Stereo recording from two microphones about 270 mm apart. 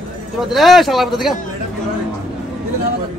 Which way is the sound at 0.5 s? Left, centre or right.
Centre.